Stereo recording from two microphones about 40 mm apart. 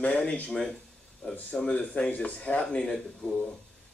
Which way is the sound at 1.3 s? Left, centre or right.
Left.